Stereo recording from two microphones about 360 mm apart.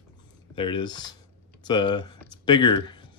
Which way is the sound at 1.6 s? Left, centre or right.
Centre.